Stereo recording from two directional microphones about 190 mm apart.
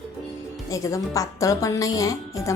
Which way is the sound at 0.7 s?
15° left (ahead or behind).